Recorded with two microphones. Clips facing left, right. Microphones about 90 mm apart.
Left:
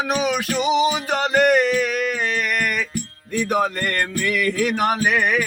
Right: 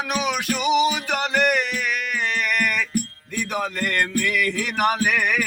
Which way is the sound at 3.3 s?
45° left (ahead or behind).